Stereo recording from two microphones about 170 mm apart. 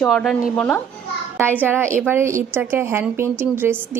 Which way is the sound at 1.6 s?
10° right (ahead or behind).